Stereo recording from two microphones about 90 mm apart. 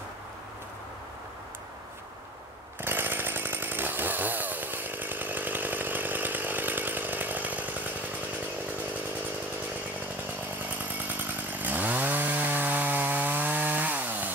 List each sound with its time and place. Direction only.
2.8 s chainsaw: 25° right (ahead or behind)
11.1 s chainsaw: 20° right (ahead or behind)